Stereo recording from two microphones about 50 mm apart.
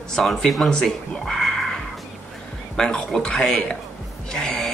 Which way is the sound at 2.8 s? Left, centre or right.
Centre.